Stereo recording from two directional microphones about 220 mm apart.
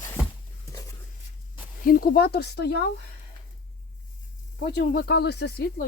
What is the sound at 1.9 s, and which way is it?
Speech, 45° left (ahead or behind).